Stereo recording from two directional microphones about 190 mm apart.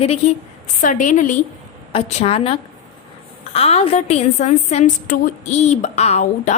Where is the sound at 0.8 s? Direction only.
45° left (ahead or behind).